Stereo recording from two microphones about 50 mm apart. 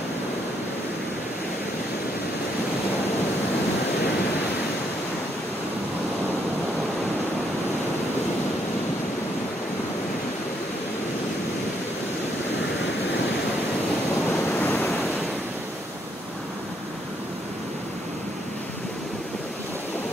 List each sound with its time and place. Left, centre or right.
14.6 s waves: left